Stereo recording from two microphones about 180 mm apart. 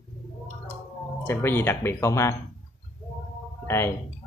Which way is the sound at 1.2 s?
15° left (ahead or behind).